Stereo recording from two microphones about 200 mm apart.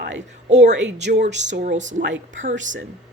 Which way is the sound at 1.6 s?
35° right (ahead or behind).